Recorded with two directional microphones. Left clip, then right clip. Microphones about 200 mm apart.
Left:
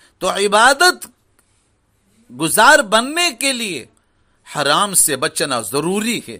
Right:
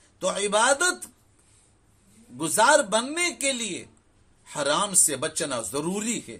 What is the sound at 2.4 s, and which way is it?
A man's voice, 40° left (ahead or behind).